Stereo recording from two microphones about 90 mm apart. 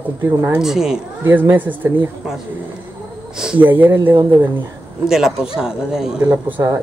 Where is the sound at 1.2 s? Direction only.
20° right (ahead or behind).